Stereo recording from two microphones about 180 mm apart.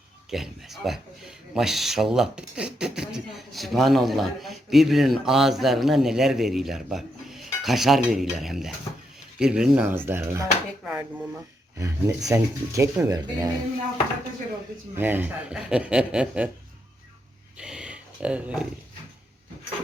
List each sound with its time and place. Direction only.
0.3 s speech: centre (ahead or behind)
11.8 s speech: 15° right (ahead or behind)
14.9 s speech: 10° right (ahead or behind)
17.6 s speech: 5° right (ahead or behind)